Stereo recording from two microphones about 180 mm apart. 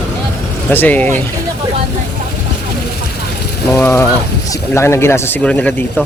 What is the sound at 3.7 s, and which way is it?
Mechanisms, 15° left (ahead or behind).